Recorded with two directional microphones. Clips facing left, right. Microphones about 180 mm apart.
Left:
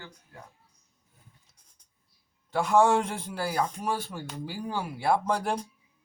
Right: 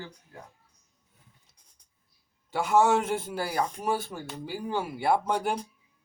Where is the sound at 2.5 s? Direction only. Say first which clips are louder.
Left 1 dB; 5° right (ahead or behind).